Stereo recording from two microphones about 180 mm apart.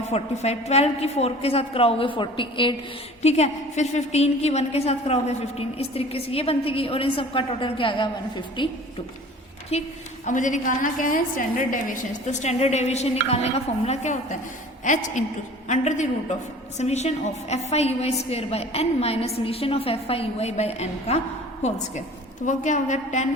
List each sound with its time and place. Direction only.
0.1 s a woman's voice: 35° left (ahead or behind)
9.7 s a woman's voice: 35° left (ahead or behind)
22.4 s a woman's voice: 40° left (ahead or behind)